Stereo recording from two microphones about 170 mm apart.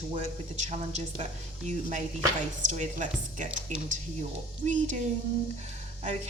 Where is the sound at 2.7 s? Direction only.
45° right (ahead or behind).